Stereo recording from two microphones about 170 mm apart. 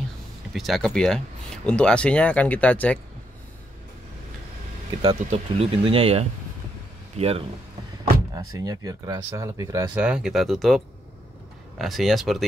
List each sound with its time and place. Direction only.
0.5 s speech: centre (ahead or behind)
5.0 s speech: 35° right (ahead or behind)
8.5 s speech: 20° right (ahead or behind)
9.9 s speech: 5° right (ahead or behind)
11.8 s speech: centre (ahead or behind)